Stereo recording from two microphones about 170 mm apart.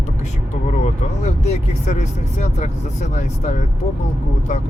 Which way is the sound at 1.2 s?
40° left (ahead or behind).